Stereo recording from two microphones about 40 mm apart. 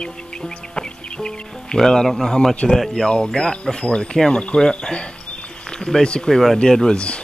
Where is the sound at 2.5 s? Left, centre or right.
Left.